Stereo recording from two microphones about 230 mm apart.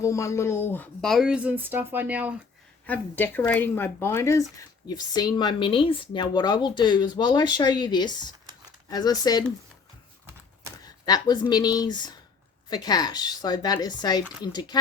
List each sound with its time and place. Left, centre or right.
0.0 s speech: centre
2.8 s speech: centre
10.8 s speech: centre